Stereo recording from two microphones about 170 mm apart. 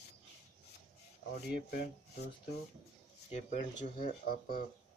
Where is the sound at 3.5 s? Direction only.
55° left (ahead or behind).